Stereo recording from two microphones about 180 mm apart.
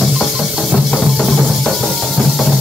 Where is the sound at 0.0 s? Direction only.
Centre (ahead or behind).